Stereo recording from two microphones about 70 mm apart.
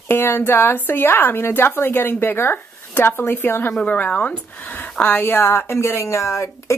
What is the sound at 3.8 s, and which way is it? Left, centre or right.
A woman's voice, centre.